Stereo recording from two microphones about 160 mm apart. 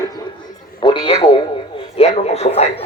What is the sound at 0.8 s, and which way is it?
Speech, 30° left (ahead or behind).